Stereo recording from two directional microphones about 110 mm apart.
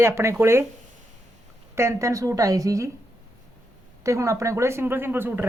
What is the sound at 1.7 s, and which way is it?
Speech, 25° right (ahead or behind).